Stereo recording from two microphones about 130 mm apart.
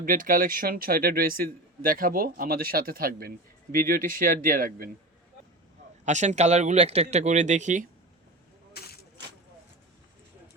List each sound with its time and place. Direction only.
0.0 s speech: 90° right
6.1 s speech: 65° right (ahead or behind)